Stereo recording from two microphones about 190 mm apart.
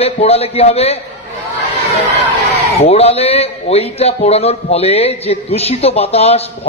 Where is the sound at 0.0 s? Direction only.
30° left (ahead or behind).